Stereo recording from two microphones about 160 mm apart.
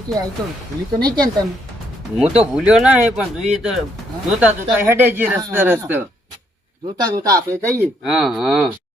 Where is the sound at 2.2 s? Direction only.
5° right (ahead or behind).